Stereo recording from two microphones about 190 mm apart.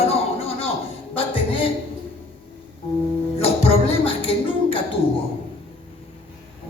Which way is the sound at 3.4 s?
30° left (ahead or behind).